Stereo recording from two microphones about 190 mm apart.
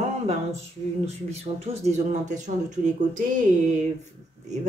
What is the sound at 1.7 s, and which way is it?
Speech, 35° right (ahead or behind).